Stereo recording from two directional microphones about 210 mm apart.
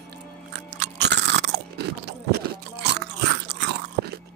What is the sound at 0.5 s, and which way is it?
Crunch, 55° right (ahead or behind).